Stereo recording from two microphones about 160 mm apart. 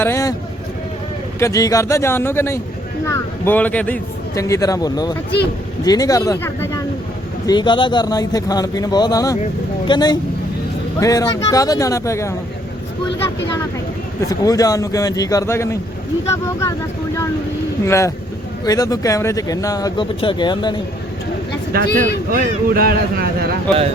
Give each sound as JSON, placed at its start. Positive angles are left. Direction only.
{"t": 0.0, "sound": "speech", "side_deg": 20}
{"t": 1.4, "sound": "a man's voice", "side_deg": 20}
{"t": 14.2, "sound": "speech", "side_deg": 20}
{"t": 17.8, "sound": "a man's voice", "side_deg": 20}
{"t": 21.7, "sound": "speech", "side_deg": -70}